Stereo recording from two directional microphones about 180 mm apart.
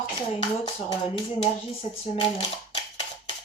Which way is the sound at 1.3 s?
30° left (ahead or behind).